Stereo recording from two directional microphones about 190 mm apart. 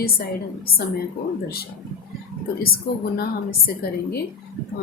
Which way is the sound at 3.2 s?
55° left (ahead or behind).